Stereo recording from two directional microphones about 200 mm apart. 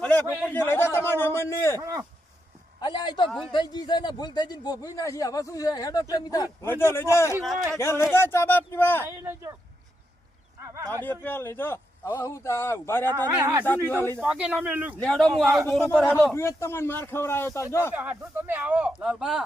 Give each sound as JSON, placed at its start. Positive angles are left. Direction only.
{"t": 0.0, "sound": "a sound", "side_deg": 10}
{"t": 0.4, "sound": "a man's voice", "side_deg": 10}
{"t": 1.8, "sound": "speech", "side_deg": -15}
{"t": 2.8, "sound": "a man's voice", "side_deg": 20}
{"t": 3.2, "sound": "a man's voice", "side_deg": 0}
{"t": 3.5, "sound": "a man's voice", "side_deg": 20}
{"t": 9.0, "sound": "speech", "side_deg": -15}
{"t": 11.0, "sound": "a man's voice", "side_deg": 10}
{"t": 13.3, "sound": "speech", "side_deg": -10}
{"t": 15.0, "sound": "a man's voice", "side_deg": 5}
{"t": 17.9, "sound": "speech", "side_deg": -10}